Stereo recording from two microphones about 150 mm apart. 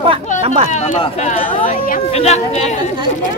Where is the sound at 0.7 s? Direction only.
50° left (ahead or behind).